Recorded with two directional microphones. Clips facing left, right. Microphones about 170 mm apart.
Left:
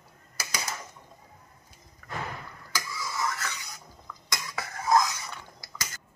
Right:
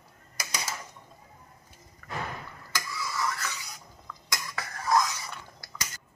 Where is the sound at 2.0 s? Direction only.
Centre (ahead or behind).